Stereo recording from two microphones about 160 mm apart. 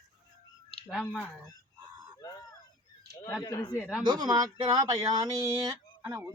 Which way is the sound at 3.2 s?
20° left (ahead or behind).